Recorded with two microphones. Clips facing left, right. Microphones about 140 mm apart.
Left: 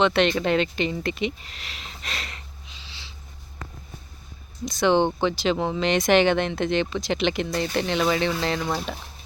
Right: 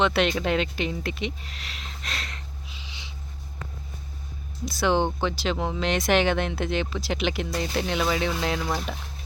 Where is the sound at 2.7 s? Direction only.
15° right (ahead or behind).